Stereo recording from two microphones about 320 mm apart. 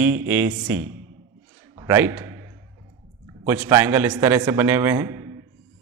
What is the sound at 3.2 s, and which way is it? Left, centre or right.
A man's voice, centre.